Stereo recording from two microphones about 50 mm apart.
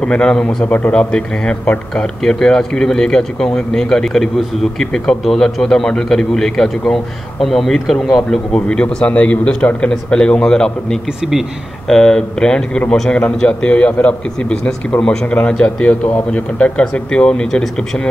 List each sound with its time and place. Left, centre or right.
0.0 s speech: centre
8.5 s a man's voice: centre
15.0 s a man's voice: left